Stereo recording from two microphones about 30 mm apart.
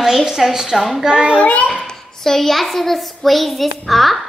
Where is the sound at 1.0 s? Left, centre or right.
Right.